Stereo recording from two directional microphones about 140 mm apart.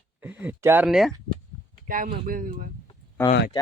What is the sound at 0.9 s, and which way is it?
Speech, centre (ahead or behind).